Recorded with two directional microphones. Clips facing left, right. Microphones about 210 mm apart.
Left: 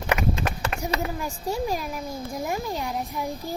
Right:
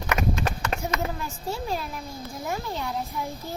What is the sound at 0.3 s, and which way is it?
Run, 30° left (ahead or behind).